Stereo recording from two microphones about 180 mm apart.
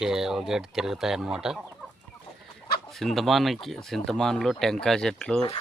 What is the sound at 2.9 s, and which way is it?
Speech, centre (ahead or behind).